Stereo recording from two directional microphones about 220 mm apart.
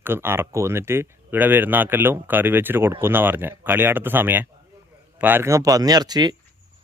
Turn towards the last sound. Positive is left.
turn(degrees=-20)  # may be behind; listen again after turning